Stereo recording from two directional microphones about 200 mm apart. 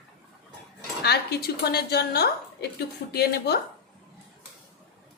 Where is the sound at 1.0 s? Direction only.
55° left (ahead or behind).